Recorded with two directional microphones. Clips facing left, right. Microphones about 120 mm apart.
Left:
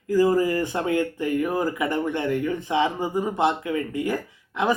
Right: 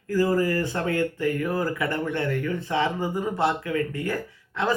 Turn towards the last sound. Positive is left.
turn(degrees=15)  # may be behind; listen again after turning